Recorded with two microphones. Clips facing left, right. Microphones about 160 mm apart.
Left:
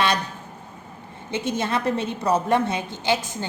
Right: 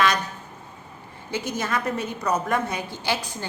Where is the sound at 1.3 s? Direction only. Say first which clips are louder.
Left 2 dB; 25° left (ahead or behind).